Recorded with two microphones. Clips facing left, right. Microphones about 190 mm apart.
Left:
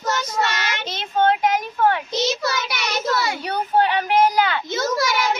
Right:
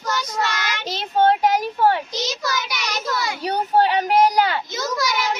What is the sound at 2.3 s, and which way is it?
Child singing, 25° left (ahead or behind).